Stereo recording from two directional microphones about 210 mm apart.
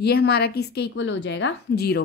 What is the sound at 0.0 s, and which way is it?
A woman's voice, 50° left (ahead or behind).